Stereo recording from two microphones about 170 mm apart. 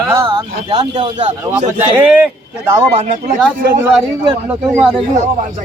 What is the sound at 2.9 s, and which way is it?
Speech, 45° right (ahead or behind).